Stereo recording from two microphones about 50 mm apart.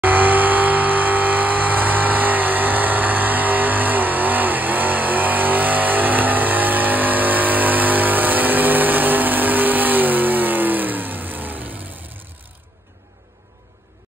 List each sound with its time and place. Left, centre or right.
0.0 s vehicle: right